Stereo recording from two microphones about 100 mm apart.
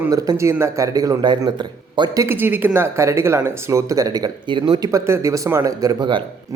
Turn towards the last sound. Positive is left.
turn(degrees=-35)  # may be behind; listen again after turning